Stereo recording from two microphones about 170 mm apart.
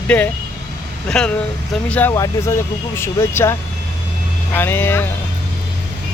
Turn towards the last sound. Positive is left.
turn(degrees=10)  # may be behind; listen again after turning